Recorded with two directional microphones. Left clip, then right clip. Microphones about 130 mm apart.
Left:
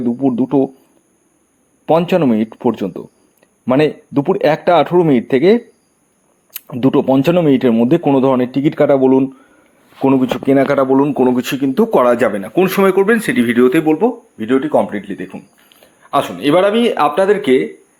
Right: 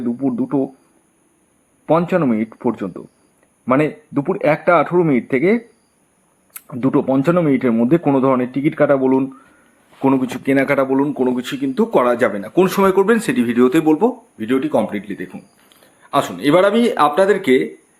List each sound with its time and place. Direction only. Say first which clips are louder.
0.0 s speech: left 5 dB; 30° left (ahead or behind)
1.9 s speech: left 3 dB; 40° left (ahead or behind)
6.7 s speech: left 4 dB; 35° left (ahead or behind)
10.2 s speech: left 4 dB; 20° left (ahead or behind); by 11.1 s 35° left (ahead or behind)
11.1 s speech: left 5 dB; 55° left (ahead or behind)
12.5 s speech: left 2 dB; 10° left (ahead or behind)
13.7 s speech: left 1 dB; 5° right (ahead or behind)
14.3 s speech: left 4 dB; 10° left (ahead or behind)